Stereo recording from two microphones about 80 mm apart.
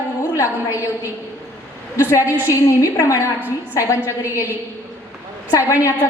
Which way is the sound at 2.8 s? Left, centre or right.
Left.